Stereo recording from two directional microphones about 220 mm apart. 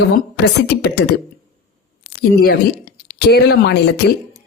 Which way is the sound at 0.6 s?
50° left (ahead or behind).